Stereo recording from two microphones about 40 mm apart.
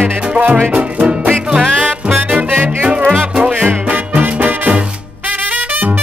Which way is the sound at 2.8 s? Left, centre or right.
Right.